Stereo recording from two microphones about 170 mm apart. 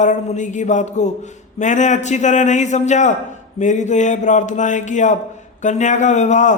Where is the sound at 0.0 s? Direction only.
45° left (ahead or behind).